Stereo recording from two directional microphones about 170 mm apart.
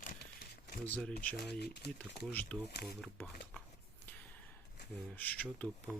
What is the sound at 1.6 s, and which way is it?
Speech, 80° left.